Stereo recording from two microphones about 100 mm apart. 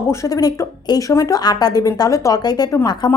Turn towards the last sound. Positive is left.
turn(degrees=45)  # may be behind; listen again after turning